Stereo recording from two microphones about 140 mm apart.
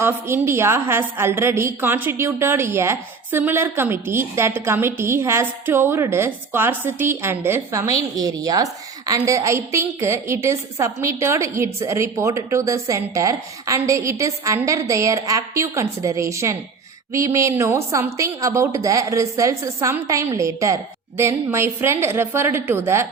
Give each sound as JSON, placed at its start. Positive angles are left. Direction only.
{"t": 0.0, "sound": "a woman's voice", "side_deg": -20}